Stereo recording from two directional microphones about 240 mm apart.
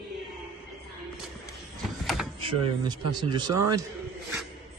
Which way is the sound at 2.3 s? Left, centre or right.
Centre.